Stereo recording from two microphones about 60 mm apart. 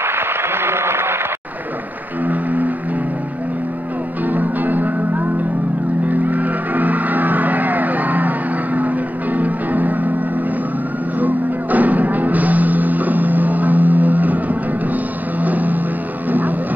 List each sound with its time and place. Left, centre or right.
0.0 s a sound: right
2.2 s music: right
4.3 s music: right
11.1 s music: right
16.3 s vehicle: right